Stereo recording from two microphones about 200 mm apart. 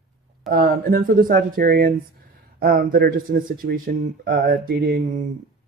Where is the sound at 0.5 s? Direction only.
45° right (ahead or behind).